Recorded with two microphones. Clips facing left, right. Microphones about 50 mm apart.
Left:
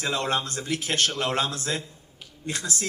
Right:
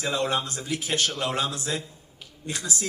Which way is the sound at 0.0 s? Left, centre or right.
Left.